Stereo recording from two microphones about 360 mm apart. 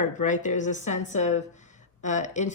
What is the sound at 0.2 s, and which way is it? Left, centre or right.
Speech, left.